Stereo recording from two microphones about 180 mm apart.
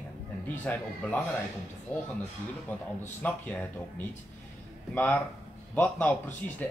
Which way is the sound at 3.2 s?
5° left (ahead or behind).